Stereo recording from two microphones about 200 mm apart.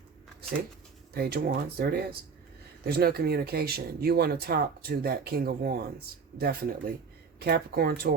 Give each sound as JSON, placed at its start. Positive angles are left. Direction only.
{"t": 1.1, "sound": "speech", "side_deg": -50}